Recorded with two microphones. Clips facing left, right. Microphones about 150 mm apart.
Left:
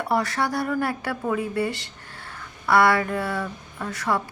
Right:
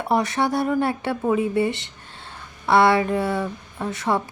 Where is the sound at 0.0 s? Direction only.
20° right (ahead or behind).